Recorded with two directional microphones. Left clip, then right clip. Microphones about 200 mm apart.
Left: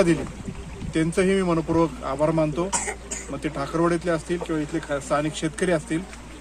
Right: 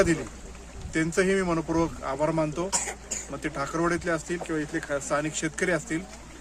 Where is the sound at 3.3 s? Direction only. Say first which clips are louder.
Left 3 dB; 10° right (ahead or behind).